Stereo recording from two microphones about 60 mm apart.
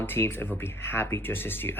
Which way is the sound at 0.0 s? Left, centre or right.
Left.